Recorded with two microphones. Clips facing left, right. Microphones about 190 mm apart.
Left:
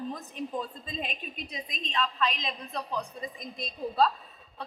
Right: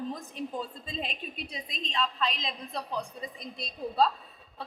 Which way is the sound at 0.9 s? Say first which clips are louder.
Even; 30° right (ahead or behind).